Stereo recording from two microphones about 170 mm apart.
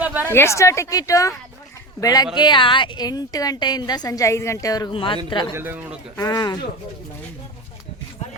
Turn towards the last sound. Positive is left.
turn(degrees=25)  # may be behind; listen again after turning